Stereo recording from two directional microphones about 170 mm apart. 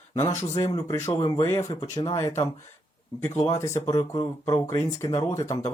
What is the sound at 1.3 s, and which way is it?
Speech, 15° left (ahead or behind).